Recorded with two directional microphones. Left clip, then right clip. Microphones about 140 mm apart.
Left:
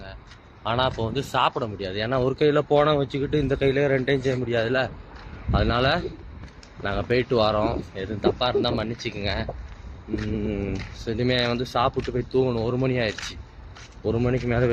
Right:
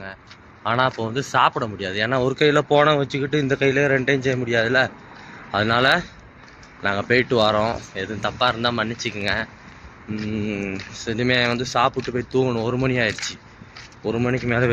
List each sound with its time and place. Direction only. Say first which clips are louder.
0.6 s a man's voice: right 4 dB; 5° right (ahead or behind)
1.8 s speech: right 4 dB; 10° left (ahead or behind)
10.5 s speech: right 2 dB; 20° left (ahead or behind)
11.9 s speech: right 2 dB; 5° left (ahead or behind)